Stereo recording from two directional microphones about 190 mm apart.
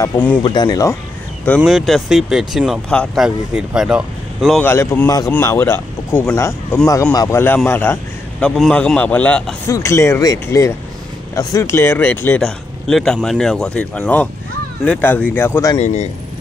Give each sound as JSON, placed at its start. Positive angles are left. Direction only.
{"t": 0.0, "sound": "a man's voice", "side_deg": 10}
{"t": 0.4, "sound": "speech", "side_deg": 25}
{"t": 1.6, "sound": "speech", "side_deg": 0}
{"t": 4.6, "sound": "a man's voice", "side_deg": 15}
{"t": 15.8, "sound": "speech", "side_deg": 35}